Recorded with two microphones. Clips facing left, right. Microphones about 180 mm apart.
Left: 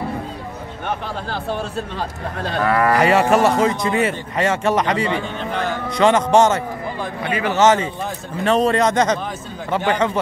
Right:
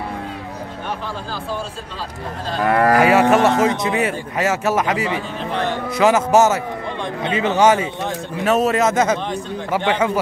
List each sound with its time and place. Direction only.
0.8 s speech: 65° left (ahead or behind)
3.0 s speech: centre (ahead or behind)
7.2 s speech: 20° right (ahead or behind)
7.6 s speech: 10° right (ahead or behind)